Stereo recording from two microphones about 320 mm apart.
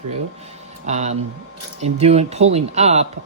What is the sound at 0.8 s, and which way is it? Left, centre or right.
Speech, right.